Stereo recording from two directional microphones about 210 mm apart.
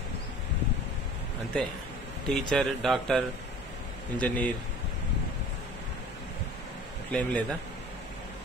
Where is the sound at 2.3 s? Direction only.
Centre (ahead or behind).